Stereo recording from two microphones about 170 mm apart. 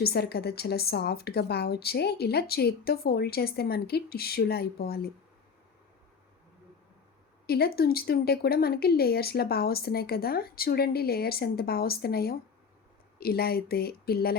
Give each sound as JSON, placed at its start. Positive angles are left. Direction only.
{"t": 0.0, "sound": "a woman's voice", "side_deg": 70}
{"t": 7.4, "sound": "speech", "side_deg": 65}